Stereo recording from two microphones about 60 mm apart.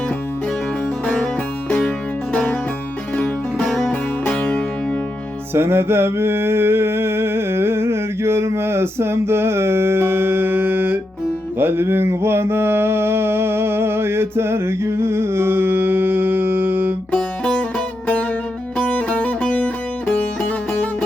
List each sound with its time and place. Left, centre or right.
1.0 s music: centre
3.7 s music: centre
4.3 s music: centre
5.5 s a sound: right
11.6 s mantra: right
18.8 s music: left